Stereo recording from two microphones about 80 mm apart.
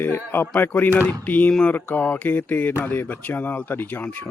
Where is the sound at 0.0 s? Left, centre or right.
Left.